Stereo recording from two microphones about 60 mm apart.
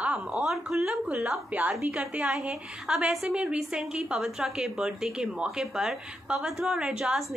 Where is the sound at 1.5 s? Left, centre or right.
Right.